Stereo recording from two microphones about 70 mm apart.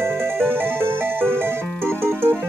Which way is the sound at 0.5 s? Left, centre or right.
Right.